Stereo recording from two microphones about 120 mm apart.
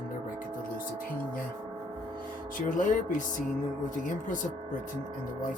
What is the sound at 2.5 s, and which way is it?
Speech, 90° left.